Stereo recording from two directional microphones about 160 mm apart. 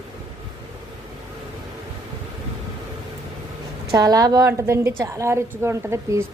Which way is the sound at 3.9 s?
25° right (ahead or behind).